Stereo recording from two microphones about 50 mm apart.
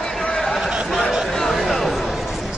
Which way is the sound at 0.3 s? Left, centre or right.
Centre.